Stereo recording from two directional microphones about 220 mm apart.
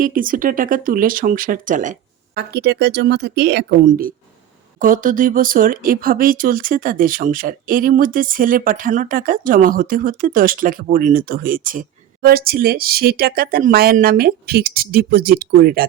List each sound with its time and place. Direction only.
0.0 s speech: 40° right (ahead or behind)